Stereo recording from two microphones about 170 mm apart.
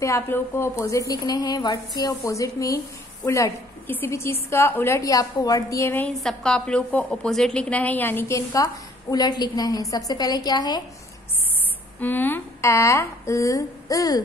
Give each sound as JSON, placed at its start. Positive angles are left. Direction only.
{"t": 0.0, "sound": "a woman's voice", "side_deg": 15}
{"t": 6.1, "sound": "a woman's voice", "side_deg": 5}
{"t": 12.0, "sound": "a woman's voice", "side_deg": 10}